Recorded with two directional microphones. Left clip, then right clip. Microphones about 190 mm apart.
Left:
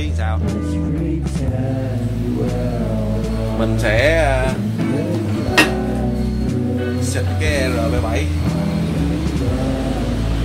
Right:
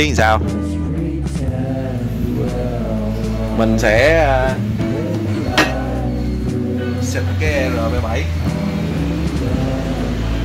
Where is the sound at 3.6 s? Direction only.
50° right (ahead or behind).